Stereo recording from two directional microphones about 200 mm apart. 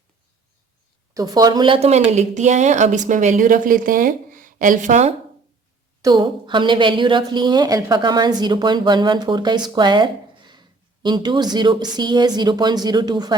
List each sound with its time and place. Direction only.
1.1 s speech: 20° right (ahead or behind); by 5.1 s 35° right (ahead or behind)
6.0 s a woman's voice: 20° right (ahead or behind)